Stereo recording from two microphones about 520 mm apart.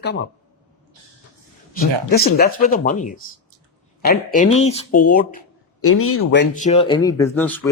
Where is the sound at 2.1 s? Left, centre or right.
Centre.